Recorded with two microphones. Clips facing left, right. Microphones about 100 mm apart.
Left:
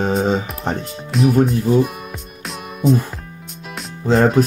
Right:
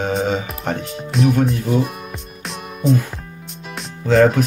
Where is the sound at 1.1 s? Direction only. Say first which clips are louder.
Left 2 dB; centre (ahead or behind).